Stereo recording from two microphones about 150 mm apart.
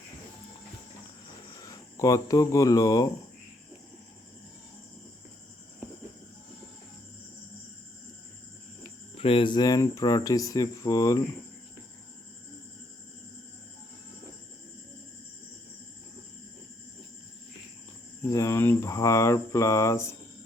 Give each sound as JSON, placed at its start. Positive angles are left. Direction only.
{"t": 1.6, "sound": "speech", "side_deg": 20}
{"t": 9.1, "sound": "speech", "side_deg": 40}
{"t": 18.3, "sound": "speech", "side_deg": 20}